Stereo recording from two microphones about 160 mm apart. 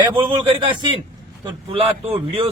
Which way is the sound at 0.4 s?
30° right (ahead or behind).